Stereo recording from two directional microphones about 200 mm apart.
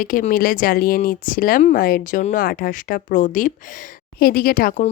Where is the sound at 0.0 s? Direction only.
45° left (ahead or behind).